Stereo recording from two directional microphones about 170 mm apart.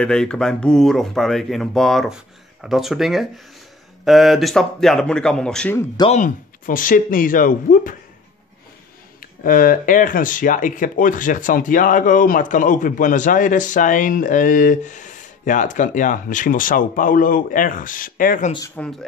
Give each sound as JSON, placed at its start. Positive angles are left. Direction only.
{"t": 0.0, "sound": "speech", "side_deg": 5}
{"t": 6.0, "sound": "speech", "side_deg": 45}
{"t": 9.2, "sound": "speech", "side_deg": 55}
{"t": 18.8, "sound": "speech", "side_deg": 10}